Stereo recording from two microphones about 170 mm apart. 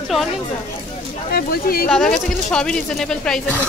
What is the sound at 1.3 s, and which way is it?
Speech, 60° left (ahead or behind).